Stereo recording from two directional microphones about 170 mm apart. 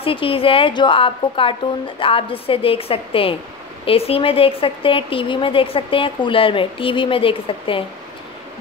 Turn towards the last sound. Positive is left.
turn(degrees=30)  # may be behind; listen again after turning